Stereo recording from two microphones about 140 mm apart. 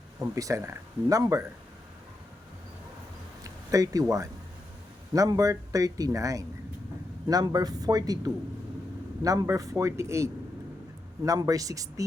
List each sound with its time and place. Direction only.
0.2 s speech: 25° right (ahead or behind)
3.4 s speech: 25° right (ahead or behind)